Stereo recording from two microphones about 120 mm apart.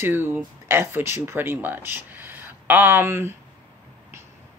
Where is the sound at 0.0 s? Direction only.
20° right (ahead or behind).